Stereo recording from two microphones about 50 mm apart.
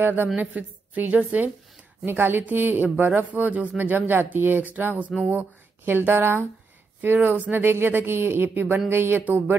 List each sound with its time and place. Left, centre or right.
0.0 s speech: right
3.7 s speech: right
5.9 s speech: right